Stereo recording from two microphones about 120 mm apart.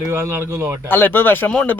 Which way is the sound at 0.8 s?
15° left (ahead or behind).